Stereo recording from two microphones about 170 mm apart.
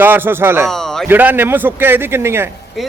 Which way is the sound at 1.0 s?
10° right (ahead or behind).